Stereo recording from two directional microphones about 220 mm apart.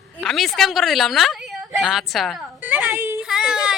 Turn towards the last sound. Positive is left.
turn(degrees=0)  # may be behind; listen again after turning